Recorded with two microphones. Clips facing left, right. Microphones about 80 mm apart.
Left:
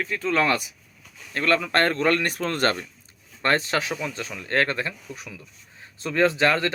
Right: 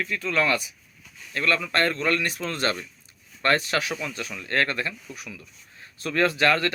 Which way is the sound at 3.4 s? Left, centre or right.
Left.